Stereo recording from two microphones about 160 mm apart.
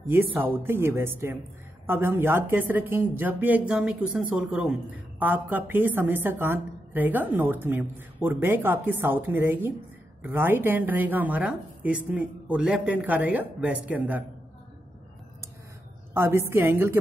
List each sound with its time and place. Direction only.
0.1 s a woman's voice: 15° right (ahead or behind)
16.1 s a woman's voice: 15° right (ahead or behind)